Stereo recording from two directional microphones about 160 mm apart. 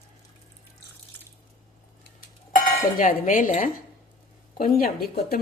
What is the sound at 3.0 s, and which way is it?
Speech, 55° left (ahead or behind).